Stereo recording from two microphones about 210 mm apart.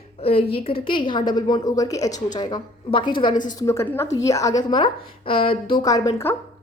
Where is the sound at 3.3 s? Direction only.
35° left (ahead or behind).